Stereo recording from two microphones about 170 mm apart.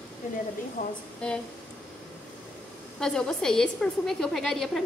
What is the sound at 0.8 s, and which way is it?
Speech, 50° left (ahead or behind).